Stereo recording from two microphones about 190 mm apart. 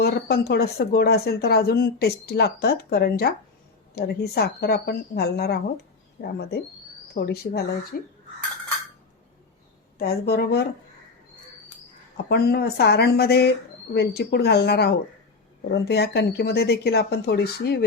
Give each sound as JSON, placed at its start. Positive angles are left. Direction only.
{"t": 0.0, "sound": "speech", "side_deg": 55}
{"t": 7.1, "sound": "speech", "side_deg": 55}
{"t": 10.0, "sound": "speech", "side_deg": 55}
{"t": 12.1, "sound": "speech", "side_deg": 55}